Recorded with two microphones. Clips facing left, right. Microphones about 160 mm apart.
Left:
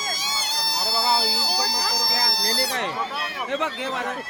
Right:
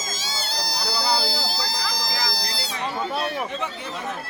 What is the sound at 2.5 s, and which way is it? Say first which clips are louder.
Speech: left 3 dB; 70° left (ahead or behind).